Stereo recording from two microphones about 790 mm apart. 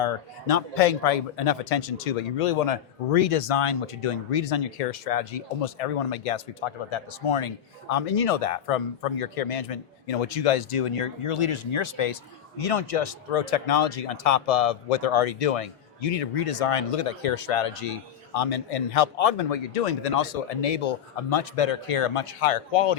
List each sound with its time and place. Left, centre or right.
0.0 s speech: left